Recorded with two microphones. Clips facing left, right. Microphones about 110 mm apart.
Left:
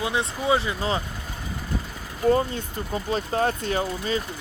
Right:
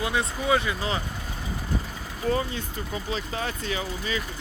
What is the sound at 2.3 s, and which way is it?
Speech, 40° left (ahead or behind).